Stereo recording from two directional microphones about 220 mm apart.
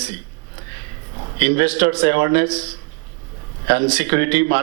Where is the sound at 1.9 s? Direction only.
25° right (ahead or behind).